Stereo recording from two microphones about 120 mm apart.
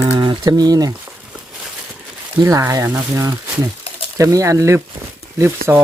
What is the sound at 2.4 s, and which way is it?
Speech, 25° right (ahead or behind).